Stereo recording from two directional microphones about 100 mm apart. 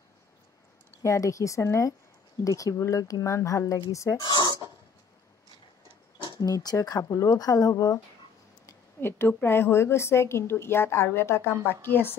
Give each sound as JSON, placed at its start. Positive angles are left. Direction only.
{"t": 1.0, "sound": "speech", "side_deg": 30}
{"t": 4.2, "sound": "a sound", "side_deg": 45}
{"t": 6.2, "sound": "speech", "side_deg": 40}
{"t": 9.0, "sound": "a woman's voice", "side_deg": 20}